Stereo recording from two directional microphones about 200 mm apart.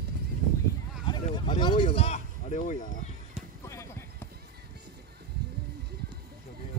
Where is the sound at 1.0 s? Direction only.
20° left (ahead or behind).